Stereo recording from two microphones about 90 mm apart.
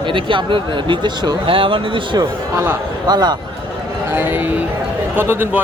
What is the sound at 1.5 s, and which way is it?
Speech, 75° right (ahead or behind).